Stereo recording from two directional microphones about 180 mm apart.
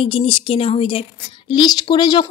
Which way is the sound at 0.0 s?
30° left (ahead or behind).